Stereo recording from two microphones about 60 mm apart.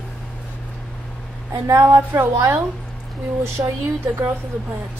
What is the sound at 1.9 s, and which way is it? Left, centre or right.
Speech, right.